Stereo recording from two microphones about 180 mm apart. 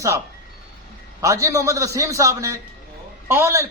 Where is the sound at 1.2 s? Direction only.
15° right (ahead or behind).